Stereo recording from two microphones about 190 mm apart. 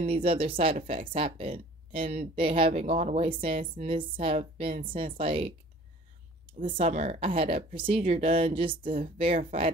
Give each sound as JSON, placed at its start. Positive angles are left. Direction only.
{"t": 0.0, "sound": "speech", "side_deg": -30}
{"t": 6.6, "sound": "speech", "side_deg": -30}